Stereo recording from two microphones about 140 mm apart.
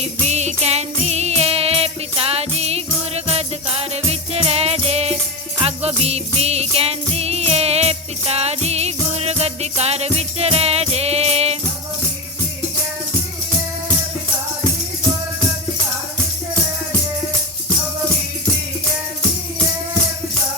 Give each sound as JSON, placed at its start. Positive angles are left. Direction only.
{"t": 0.0, "sound": "jingle bell", "side_deg": -55}
{"t": 5.5, "sound": "music", "side_deg": -45}